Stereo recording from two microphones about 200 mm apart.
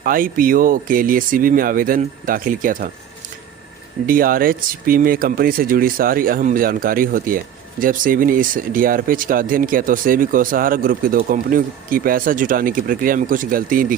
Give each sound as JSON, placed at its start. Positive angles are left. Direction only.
{"t": 0.0, "sound": "speech", "side_deg": -45}
{"t": 4.0, "sound": "speech", "side_deg": -45}